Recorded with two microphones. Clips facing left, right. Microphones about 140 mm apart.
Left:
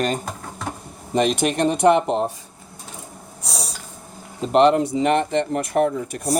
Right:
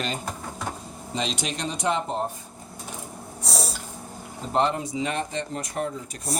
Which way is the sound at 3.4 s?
Centre (ahead or behind).